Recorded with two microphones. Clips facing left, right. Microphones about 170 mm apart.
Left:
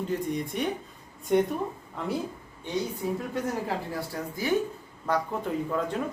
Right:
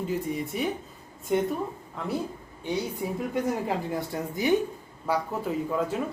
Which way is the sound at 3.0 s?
15° right (ahead or behind).